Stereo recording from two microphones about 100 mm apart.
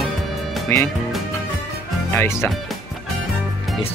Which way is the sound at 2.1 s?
25° left (ahead or behind).